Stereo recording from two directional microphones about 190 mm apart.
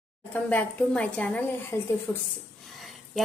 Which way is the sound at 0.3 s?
5° left (ahead or behind).